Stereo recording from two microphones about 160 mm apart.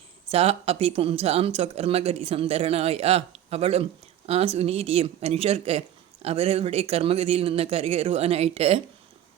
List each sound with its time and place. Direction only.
0.3 s speech: 40° right (ahead or behind)